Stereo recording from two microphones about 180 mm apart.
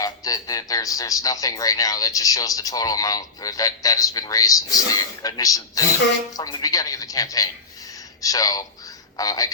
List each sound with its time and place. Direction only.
0.0 s a man's voice: 20° left (ahead or behind)